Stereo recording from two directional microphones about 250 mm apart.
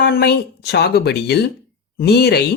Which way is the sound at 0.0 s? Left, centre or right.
Left.